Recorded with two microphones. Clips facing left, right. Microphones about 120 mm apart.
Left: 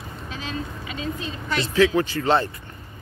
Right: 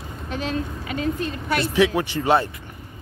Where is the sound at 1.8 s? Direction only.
20° right (ahead or behind).